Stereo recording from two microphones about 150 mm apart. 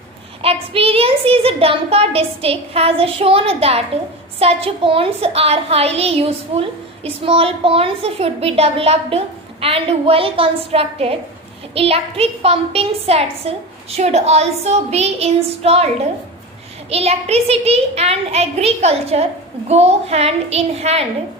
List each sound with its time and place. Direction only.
0.4 s a child's voice: 40° right (ahead or behind)
16.9 s a child's voice: 45° right (ahead or behind)